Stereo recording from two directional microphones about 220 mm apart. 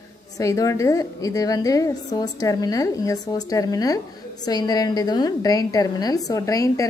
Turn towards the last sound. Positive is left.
turn(degrees=15)  # may be behind; listen again after turning